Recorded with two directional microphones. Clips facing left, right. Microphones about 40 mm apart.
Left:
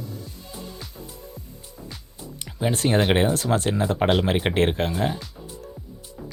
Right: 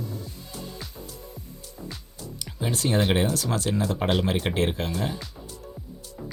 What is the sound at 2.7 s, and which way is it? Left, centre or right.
Speech, left.